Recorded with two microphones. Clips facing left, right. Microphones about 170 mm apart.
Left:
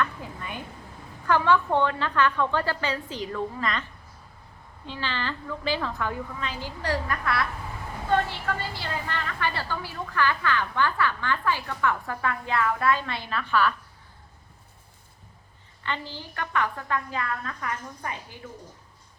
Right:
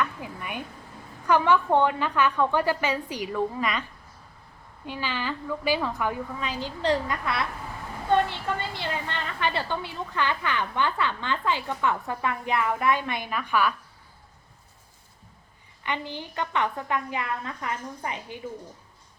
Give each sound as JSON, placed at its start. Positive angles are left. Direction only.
{"t": 0.0, "sound": "a sound", "side_deg": -15}
{"t": 1.3, "sound": "a woman's voice", "side_deg": -15}
{"t": 4.9, "sound": "a woman's voice", "side_deg": -10}
{"t": 15.8, "sound": "a woman's voice", "side_deg": -15}